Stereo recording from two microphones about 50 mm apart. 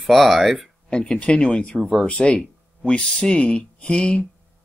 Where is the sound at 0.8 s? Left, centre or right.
Centre.